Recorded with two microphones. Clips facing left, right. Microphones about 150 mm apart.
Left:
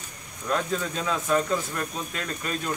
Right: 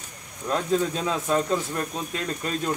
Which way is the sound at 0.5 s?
25° right (ahead or behind).